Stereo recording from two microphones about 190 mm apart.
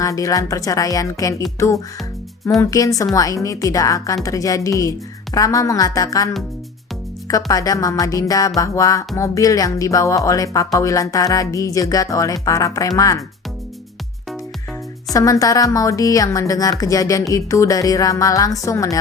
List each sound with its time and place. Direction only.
0.0 s a woman's voice: 15° left (ahead or behind)
15.1 s a woman's voice: 20° left (ahead or behind)